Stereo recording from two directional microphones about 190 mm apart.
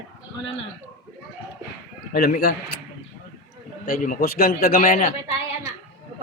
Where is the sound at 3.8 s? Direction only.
50° left (ahead or behind).